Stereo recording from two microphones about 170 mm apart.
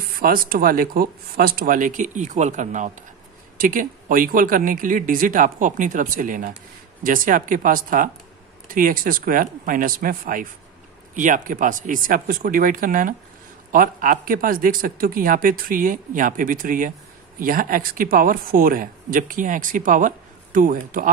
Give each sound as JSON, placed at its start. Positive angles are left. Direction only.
{"t": 0.2, "sound": "speech", "side_deg": -60}